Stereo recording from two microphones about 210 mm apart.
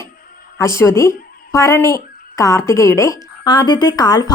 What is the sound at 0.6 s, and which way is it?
Speech, 15° left (ahead or behind).